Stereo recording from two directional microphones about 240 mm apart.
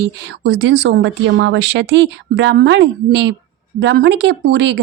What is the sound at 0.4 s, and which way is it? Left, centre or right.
Speech, right.